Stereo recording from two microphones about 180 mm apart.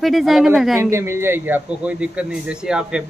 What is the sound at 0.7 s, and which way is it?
A man's voice, 15° right (ahead or behind).